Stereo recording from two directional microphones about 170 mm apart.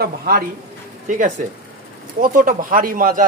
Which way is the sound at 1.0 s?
50° right (ahead or behind).